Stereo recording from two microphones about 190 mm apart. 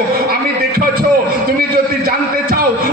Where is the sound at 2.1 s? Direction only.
50° right (ahead or behind).